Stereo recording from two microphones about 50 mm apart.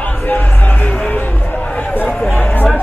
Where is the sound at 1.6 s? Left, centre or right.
Left.